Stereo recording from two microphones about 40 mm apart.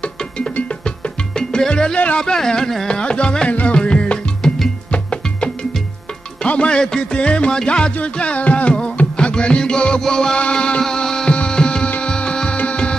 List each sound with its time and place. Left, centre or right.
0.8 s music: centre
2.1 s speech: centre
3.0 s music: left
4.4 s music: centre
4.9 s music: left
8.9 s music: left
10.8 s music: centre; by 12.9 s left